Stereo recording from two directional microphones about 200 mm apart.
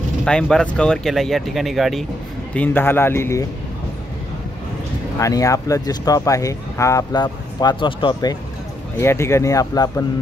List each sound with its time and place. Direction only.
0.2 s speech: 5° left (ahead or behind)
5.2 s speech: 15° left (ahead or behind)